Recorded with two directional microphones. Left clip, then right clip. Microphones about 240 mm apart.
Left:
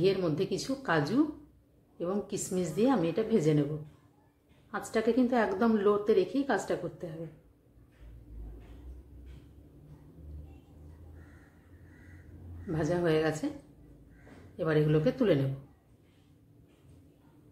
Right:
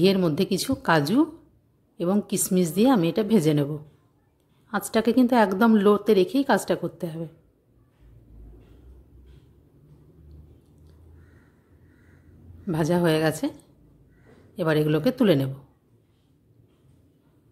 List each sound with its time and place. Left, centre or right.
0.0 s a woman's voice: right
4.6 s a woman's voice: right
12.6 s a woman's voice: right
14.6 s a woman's voice: right